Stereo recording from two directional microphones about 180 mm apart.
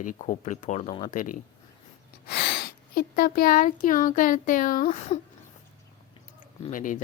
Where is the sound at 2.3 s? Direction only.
70° left (ahead or behind); by 5.2 s 35° left (ahead or behind).